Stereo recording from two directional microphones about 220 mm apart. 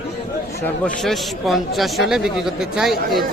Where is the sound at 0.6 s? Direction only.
5° left (ahead or behind).